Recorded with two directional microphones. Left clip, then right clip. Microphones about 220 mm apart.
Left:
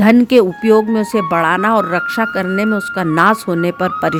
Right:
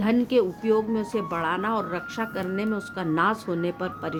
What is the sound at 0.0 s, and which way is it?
Speech, 45° left (ahead or behind).